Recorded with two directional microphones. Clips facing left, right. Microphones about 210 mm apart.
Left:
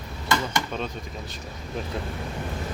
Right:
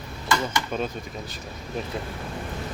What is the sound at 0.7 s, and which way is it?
Speech, 5° right (ahead or behind).